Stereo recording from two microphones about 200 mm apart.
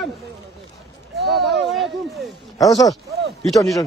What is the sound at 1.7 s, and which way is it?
Speech, centre (ahead or behind).